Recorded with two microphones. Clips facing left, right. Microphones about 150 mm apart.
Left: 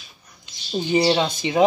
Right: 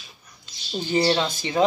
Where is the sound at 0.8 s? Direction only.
15° left (ahead or behind).